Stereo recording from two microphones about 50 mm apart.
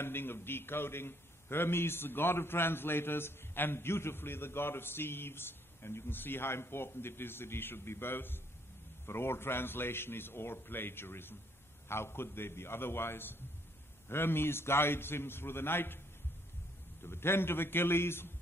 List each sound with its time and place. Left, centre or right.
0.0 s a man's voice: left
17.0 s a man's voice: left